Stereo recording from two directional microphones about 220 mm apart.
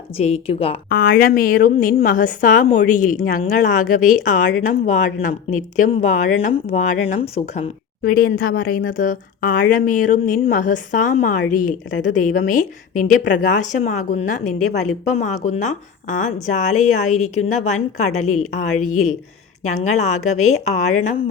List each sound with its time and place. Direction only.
0.2 s speech: 25° left (ahead or behind)
0.9 s a woman's voice: 40° left (ahead or behind); by 7.7 s 25° left (ahead or behind)
8.4 s a woman's voice: 40° left (ahead or behind)